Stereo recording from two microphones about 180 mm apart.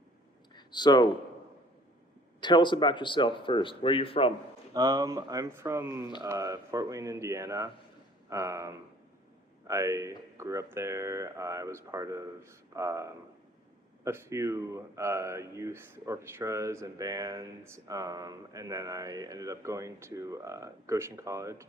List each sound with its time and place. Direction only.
0.5 s speech: 25° left (ahead or behind)
2.4 s speech: 25° left (ahead or behind)
4.7 s speech: 20° right (ahead or behind)